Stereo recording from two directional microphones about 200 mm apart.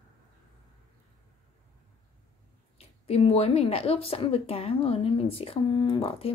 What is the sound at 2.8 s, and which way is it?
Speech, 30° left (ahead or behind).